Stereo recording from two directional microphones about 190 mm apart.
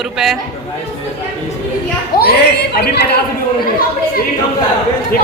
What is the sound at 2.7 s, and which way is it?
Speech, 55° left (ahead or behind).